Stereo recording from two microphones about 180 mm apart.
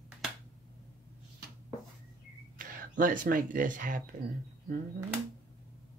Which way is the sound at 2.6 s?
50° right (ahead or behind).